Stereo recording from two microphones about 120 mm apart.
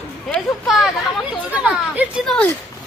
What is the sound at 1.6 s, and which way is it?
Speech, 10° right (ahead or behind).